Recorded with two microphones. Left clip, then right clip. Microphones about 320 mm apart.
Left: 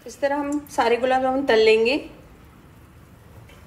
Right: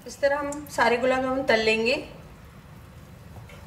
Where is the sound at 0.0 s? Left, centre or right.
Centre.